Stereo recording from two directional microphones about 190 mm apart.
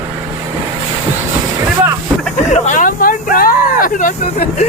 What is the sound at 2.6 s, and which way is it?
Vehicle, 40° left (ahead or behind).